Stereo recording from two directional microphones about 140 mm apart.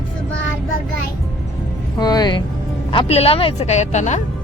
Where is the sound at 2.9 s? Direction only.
45° left (ahead or behind).